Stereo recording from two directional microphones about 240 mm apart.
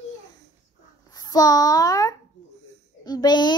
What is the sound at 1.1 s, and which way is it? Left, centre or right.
A child's voice, centre.